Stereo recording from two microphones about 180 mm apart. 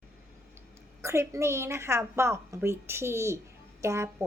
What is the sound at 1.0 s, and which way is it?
A woman's voice, 15° right (ahead or behind).